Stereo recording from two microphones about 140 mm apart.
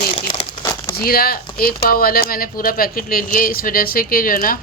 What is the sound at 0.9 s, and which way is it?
Speech, 90° left.